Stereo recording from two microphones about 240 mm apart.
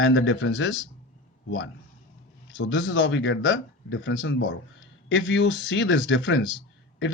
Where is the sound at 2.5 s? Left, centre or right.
Left.